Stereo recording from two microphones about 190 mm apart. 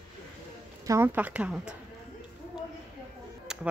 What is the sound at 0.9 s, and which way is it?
Speech, 10° right (ahead or behind).